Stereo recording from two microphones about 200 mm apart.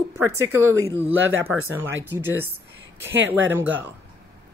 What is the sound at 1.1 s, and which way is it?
Speech, 75° right (ahead or behind).